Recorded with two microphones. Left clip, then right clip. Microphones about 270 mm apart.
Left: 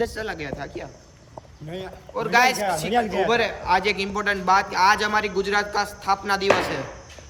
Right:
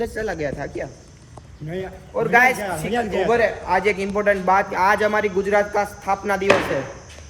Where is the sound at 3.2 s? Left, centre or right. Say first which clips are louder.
Right 2 dB; centre.